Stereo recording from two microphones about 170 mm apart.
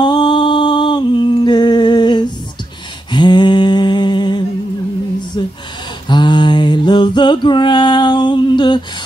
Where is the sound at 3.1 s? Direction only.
25° left (ahead or behind).